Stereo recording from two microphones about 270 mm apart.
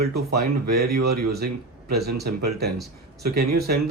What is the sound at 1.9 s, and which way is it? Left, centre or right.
Speech, right.